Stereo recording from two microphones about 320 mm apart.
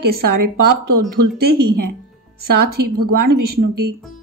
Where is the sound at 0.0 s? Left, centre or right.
Right.